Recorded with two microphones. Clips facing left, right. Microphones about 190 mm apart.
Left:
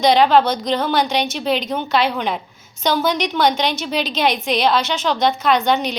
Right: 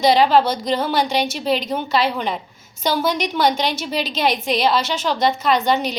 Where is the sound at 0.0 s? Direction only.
5° right (ahead or behind).